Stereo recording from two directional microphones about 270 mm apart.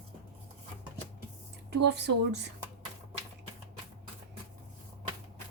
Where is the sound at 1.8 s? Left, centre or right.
Right.